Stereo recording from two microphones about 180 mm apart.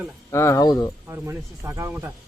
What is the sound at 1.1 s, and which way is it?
Speech, 15° right (ahead or behind).